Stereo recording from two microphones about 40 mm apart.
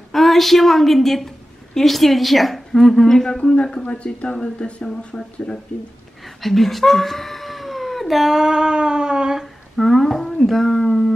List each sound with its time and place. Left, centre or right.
0.1 s a woman's voice: centre; by 5.6 s left
6.2 s speech: centre
8.4 s a sound: centre
9.8 s speech: centre